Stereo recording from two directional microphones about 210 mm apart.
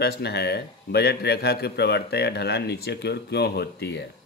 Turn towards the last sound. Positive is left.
turn(degrees=50)  # may be behind; listen again after turning